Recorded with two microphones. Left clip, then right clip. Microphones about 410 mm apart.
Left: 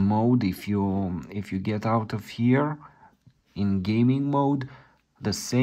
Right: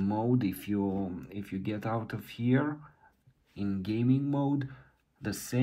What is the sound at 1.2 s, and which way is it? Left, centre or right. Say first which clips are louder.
Speech: left 6 dB; centre.